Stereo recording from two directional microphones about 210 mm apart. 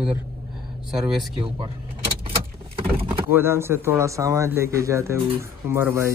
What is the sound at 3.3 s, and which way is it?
Speech, 10° right (ahead or behind).